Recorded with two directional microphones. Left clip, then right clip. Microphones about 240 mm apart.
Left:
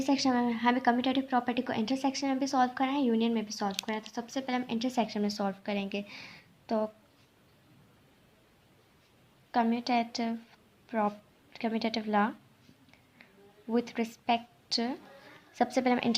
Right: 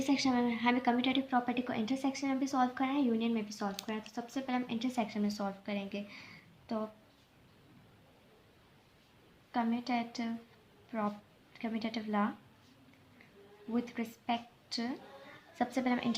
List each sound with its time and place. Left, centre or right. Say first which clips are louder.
0.0 s a woman's voice: left 3 dB; left
9.5 s a woman's voice: left 6 dB; left
13.7 s a woman's voice: left 7 dB; left